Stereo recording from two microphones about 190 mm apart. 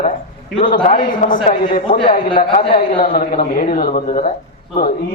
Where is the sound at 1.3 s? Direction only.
25° left (ahead or behind).